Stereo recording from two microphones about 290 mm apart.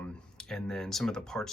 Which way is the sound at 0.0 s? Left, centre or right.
Centre.